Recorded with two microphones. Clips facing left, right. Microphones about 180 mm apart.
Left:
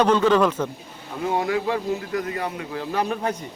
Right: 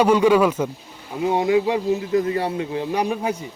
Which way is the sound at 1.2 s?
20° right (ahead or behind).